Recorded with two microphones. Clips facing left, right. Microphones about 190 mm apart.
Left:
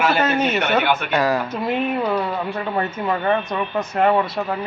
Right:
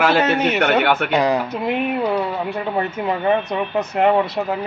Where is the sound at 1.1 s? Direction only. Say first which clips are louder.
Right 2 dB; 15° right (ahead or behind).